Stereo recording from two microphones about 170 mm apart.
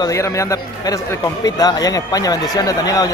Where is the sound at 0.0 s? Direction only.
20° left (ahead or behind).